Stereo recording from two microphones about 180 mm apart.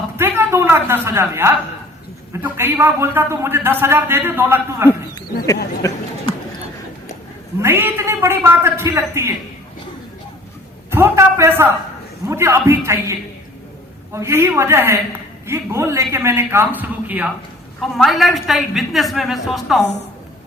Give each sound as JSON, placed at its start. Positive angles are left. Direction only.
{"t": 0.2, "sound": "a woman's voice", "side_deg": -15}
{"t": 5.8, "sound": "speech", "side_deg": 20}
{"t": 7.6, "sound": "a man's voice", "side_deg": -10}
{"t": 10.9, "sound": "a man's voice", "side_deg": -15}